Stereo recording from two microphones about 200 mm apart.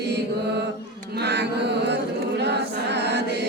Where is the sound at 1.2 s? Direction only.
60° right (ahead or behind).